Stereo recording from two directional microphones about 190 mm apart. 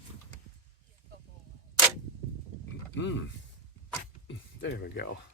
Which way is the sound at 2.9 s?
75° left (ahead or behind).